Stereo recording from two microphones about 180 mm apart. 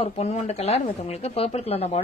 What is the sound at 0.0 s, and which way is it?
A woman's voice, 35° left (ahead or behind).